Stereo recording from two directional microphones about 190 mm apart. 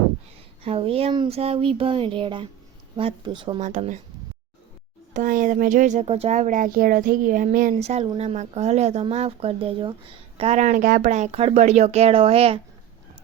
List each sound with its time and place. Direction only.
0.6 s speech: 30° right (ahead or behind)
3.6 s speech: 40° right (ahead or behind)
5.1 s speech: 45° right (ahead or behind)
7.7 s speech: 35° right (ahead or behind)